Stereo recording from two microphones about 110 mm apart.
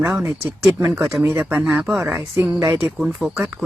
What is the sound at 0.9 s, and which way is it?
Speech, centre (ahead or behind).